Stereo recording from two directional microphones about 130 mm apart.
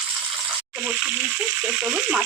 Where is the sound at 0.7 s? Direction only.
15° right (ahead or behind).